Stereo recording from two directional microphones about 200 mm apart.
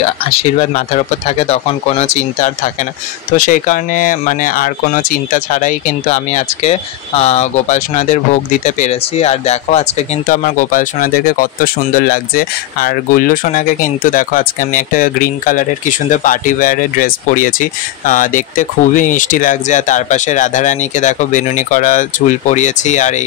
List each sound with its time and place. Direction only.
0.3 s speech: 30° left (ahead or behind)